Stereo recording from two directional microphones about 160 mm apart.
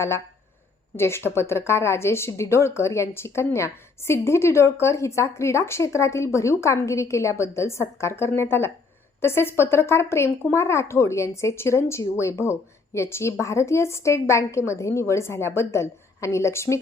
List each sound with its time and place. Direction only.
0.9 s a woman's voice: 15° left (ahead or behind)